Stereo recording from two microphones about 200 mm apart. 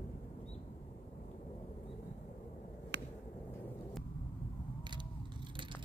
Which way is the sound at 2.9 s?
60° right (ahead or behind).